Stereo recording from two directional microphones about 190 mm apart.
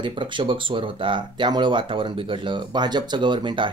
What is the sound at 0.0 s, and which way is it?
Speech, 25° right (ahead or behind).